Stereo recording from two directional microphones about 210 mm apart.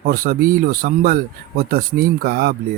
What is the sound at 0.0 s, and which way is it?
A man's voice, 45° right (ahead or behind).